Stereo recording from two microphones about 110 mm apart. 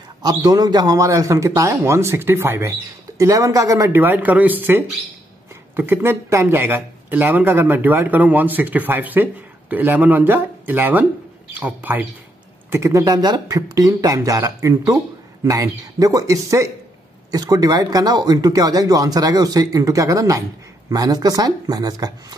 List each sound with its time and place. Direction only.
0.2 s a man's voice: 35° right (ahead or behind); by 12.1 s 15° right (ahead or behind)
12.7 s speech: 30° right (ahead or behind)